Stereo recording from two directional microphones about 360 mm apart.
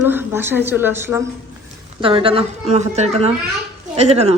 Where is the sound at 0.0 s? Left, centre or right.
Centre.